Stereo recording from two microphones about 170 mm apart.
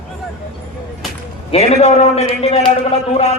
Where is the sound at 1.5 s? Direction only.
40° left (ahead or behind).